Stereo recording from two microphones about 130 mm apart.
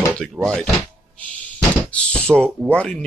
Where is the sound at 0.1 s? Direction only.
5° left (ahead or behind).